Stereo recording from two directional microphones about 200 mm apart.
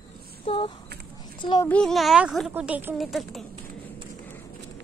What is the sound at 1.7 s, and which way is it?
Speech, 5° left (ahead or behind).